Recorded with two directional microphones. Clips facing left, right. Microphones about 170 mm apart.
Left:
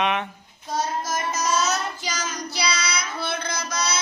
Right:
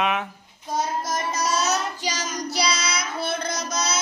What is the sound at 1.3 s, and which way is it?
Child singing, 35° right (ahead or behind).